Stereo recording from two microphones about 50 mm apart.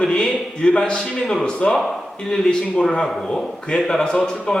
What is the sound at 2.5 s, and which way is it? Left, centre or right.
A man's voice, centre.